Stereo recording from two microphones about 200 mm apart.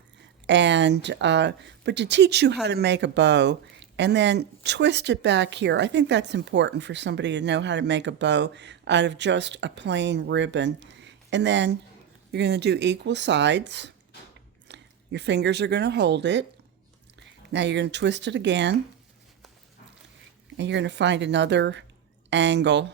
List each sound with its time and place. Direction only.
0.4 s speech: 60° right (ahead or behind)
20.6 s speech: 60° right (ahead or behind)